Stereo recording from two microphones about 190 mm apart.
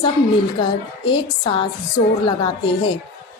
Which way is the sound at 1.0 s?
25° left (ahead or behind).